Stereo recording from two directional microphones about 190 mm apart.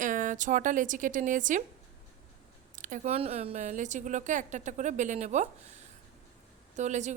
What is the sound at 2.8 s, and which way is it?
Speech, 40° right (ahead or behind).